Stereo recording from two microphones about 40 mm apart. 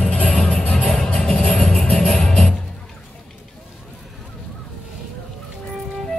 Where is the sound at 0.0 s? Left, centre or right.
Left.